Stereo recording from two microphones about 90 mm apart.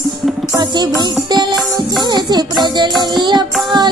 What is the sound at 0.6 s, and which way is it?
Music, 50° right (ahead or behind).